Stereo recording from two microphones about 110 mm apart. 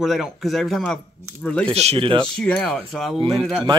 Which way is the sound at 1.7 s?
70° right (ahead or behind).